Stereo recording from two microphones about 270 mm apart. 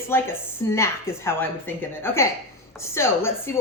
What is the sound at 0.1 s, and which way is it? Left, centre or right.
A woman's voice, centre.